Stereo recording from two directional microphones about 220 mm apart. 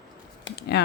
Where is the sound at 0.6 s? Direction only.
50° left (ahead or behind).